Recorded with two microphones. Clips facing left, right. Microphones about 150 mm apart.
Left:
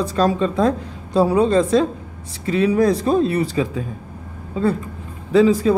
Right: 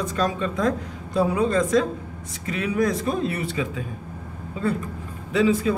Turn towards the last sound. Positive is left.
turn(degrees=35)  # may be behind; listen again after turning